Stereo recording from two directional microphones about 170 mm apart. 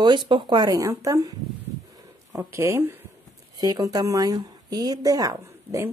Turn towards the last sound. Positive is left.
turn(degrees=-20)  # may be behind; listen again after turning